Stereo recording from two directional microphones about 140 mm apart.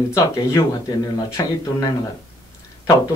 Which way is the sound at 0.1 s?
20° left (ahead or behind).